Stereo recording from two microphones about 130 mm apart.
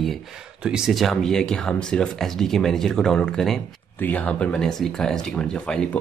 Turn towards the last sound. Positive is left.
turn(degrees=5)  # may be behind; listen again after turning